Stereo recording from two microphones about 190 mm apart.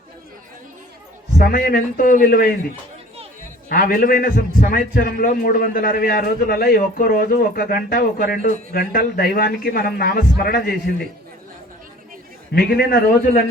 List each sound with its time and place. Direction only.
1.4 s a man's voice: 50° left (ahead or behind)
3.7 s a man's voice: 45° left (ahead or behind)
12.5 s a man's voice: 50° left (ahead or behind)